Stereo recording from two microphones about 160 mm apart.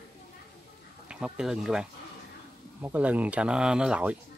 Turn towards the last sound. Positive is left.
turn(degrees=-5)  # may be behind; listen again after turning